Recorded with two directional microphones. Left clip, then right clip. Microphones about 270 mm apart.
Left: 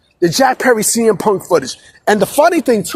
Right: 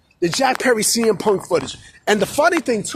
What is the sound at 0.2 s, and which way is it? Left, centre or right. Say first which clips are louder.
Speech: left 6 dB; centre.